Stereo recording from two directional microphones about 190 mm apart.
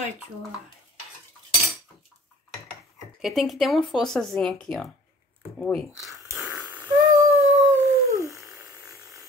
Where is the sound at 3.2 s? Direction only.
Centre (ahead or behind).